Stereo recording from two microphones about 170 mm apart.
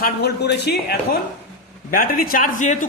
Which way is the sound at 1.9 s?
55° left (ahead or behind).